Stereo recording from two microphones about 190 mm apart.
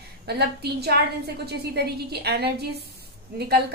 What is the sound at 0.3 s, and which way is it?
A woman's voice, 55° right (ahead or behind).